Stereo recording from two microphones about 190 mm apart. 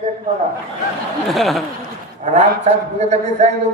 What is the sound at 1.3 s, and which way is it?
Speech, centre (ahead or behind).